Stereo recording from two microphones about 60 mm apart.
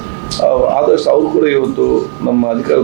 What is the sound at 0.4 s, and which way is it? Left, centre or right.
Speech, right.